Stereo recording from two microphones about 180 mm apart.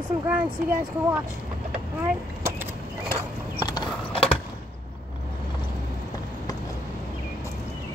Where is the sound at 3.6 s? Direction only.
25° left (ahead or behind).